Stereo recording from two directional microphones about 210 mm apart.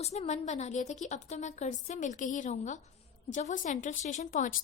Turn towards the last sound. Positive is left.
turn(degrees=40)  # may be behind; listen again after turning